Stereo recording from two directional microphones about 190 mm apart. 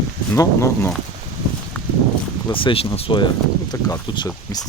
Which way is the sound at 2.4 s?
25° left (ahead or behind).